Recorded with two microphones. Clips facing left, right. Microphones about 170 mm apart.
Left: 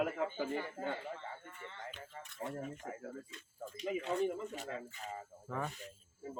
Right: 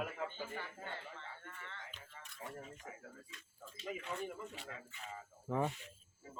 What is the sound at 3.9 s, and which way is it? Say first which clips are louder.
Speech: left 11 dB; 35° left (ahead or behind).